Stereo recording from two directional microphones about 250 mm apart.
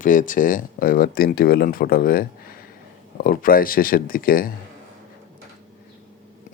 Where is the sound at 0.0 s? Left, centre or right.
Left.